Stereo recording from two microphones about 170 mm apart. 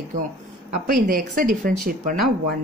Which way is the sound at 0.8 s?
55° right (ahead or behind).